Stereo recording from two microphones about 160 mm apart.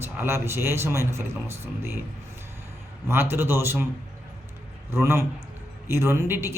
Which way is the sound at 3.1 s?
15° right (ahead or behind).